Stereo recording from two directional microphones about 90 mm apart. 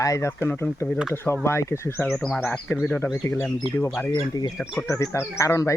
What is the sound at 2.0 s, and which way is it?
Speech, centre (ahead or behind).